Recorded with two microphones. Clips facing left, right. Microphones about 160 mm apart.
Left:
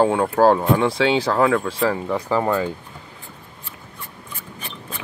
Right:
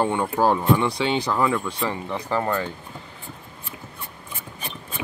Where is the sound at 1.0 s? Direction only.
80° left.